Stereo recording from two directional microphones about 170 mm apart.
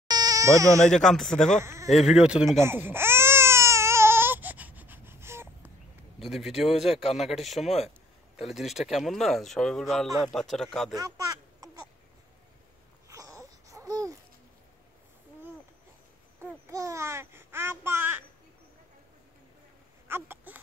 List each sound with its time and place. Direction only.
0.1 s sheep: 20° right (ahead or behind)
0.7 s speech: 5° left (ahead or behind)
1.6 s speech: 15° right (ahead or behind)
2.0 s speech: 5° right (ahead or behind)
2.6 s baby cry: 15° right (ahead or behind)
6.1 s speech: centre (ahead or behind)
11.0 s a sound: 20° right (ahead or behind)
13.1 s babbling: 20° right (ahead or behind)
16.3 s babbling: 15° right (ahead or behind)
20.1 s a sound: 15° right (ahead or behind)